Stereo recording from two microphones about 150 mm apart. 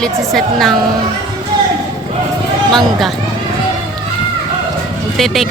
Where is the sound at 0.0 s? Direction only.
Centre (ahead or behind).